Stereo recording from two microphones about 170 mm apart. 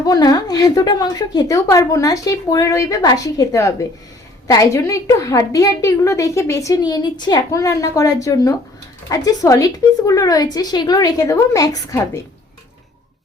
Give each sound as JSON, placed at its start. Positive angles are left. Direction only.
{"t": 0.0, "sound": "a woman's voice", "side_deg": 20}